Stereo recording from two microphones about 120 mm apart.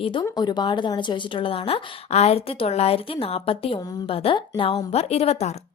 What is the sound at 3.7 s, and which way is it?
Speech, 35° left (ahead or behind).